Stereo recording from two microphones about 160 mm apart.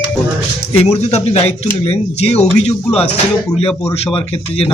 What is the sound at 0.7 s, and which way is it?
Speech, 40° left (ahead or behind).